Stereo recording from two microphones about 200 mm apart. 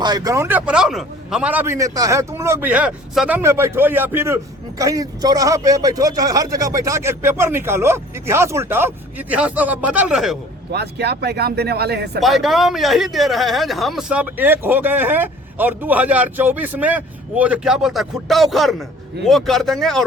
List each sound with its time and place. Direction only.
0.0 s speech: 20° right (ahead or behind); by 10.3 s 5° right (ahead or behind)
10.7 s speech: 55° right (ahead or behind)
12.2 s speech: centre (ahead or behind)